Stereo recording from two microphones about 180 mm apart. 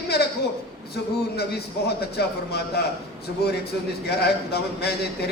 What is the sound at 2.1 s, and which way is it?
Speech, 65° left (ahead or behind).